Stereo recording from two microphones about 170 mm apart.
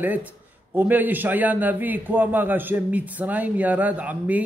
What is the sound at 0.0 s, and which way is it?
A man's voice, 10° right (ahead or behind).